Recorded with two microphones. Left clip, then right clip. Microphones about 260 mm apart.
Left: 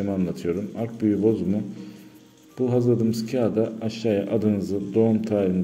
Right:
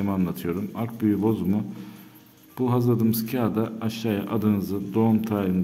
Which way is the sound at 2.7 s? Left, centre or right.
Centre.